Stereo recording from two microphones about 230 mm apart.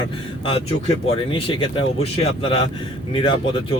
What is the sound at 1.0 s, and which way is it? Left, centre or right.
Speech, left.